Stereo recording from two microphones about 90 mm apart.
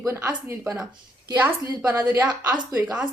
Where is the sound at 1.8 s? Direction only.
20° right (ahead or behind).